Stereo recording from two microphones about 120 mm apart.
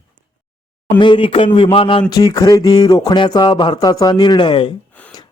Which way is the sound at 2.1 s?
30° left (ahead or behind).